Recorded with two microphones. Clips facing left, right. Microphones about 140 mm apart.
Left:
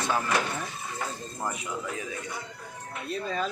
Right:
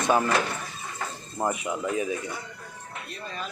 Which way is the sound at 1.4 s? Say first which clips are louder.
Right 6 dB; 50° right (ahead or behind).